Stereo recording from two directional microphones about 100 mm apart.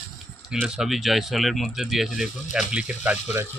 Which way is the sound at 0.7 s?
5° right (ahead or behind).